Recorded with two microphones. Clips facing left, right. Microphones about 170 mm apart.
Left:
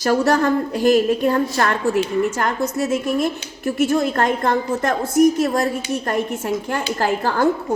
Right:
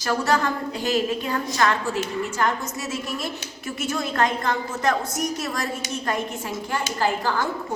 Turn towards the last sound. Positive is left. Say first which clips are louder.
# left 4 dB
turn(degrees=55)  # may be behind; listen again after turning